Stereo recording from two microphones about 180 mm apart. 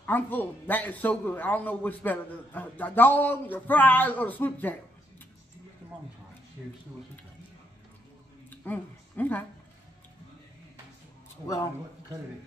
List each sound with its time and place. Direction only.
0.0 s a man's voice: 10° left (ahead or behind)
6.6 s speech: 5° right (ahead or behind)
8.5 s a sound: 10° left (ahead or behind)
11.4 s a man's voice: 15° left (ahead or behind)